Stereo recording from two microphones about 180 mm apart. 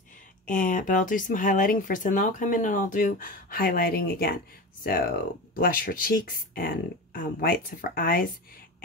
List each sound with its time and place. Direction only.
0.5 s speech: 50° left (ahead or behind)